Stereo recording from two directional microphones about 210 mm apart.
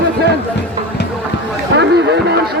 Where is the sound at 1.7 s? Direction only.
55° right (ahead or behind).